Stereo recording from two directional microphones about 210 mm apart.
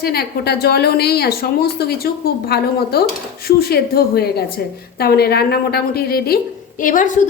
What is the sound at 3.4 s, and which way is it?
A woman's voice, 50° left (ahead or behind).